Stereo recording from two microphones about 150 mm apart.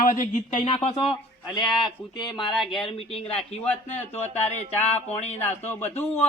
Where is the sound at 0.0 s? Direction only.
60° left (ahead or behind).